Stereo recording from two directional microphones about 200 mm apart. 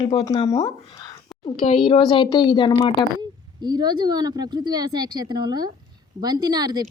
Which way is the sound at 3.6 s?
20° right (ahead or behind).